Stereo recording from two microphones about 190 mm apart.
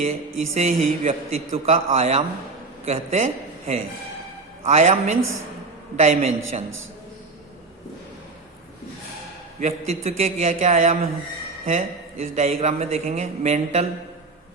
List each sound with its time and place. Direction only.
0.5 s a man's voice: 35° right (ahead or behind)
9.6 s a man's voice: 35° right (ahead or behind)